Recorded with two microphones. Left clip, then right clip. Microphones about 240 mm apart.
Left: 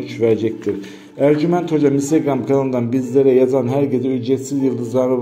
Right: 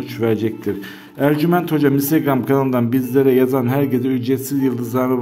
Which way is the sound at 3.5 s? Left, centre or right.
Right.